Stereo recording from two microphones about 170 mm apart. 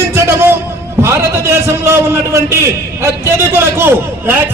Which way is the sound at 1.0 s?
15° right (ahead or behind).